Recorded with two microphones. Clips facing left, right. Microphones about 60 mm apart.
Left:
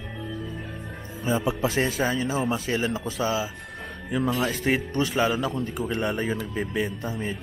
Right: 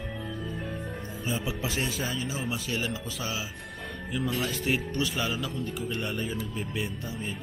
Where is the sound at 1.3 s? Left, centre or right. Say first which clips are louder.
Left 8 dB; left.